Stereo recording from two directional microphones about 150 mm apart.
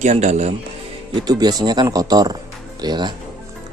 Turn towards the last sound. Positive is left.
turn(degrees=-30)  # may be behind; listen again after turning